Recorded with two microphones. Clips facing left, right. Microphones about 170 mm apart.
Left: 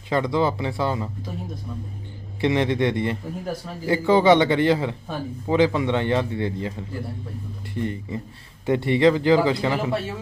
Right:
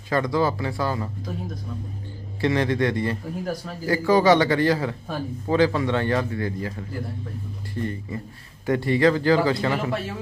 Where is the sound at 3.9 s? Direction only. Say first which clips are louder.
Left 1 dB; 25° left (ahead or behind).